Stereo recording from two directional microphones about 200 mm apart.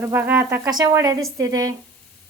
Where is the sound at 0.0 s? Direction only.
10° right (ahead or behind).